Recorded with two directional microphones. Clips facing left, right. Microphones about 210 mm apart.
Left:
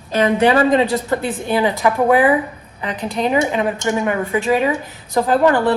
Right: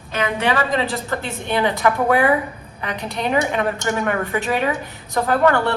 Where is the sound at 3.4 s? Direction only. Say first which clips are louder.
Left 3 dB; 20° left (ahead or behind).